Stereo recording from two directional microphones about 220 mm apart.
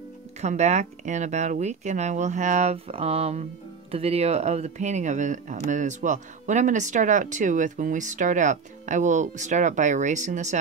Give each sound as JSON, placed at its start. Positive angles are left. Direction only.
{"t": 0.4, "sound": "speech", "side_deg": -30}